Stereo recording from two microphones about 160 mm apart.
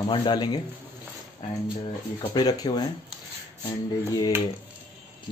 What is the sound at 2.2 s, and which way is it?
Speech, 25° left (ahead or behind).